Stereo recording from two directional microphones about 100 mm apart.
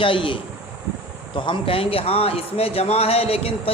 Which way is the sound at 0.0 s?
60° left (ahead or behind).